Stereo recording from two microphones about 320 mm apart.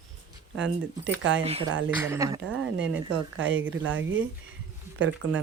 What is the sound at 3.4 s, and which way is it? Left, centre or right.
Speech, right.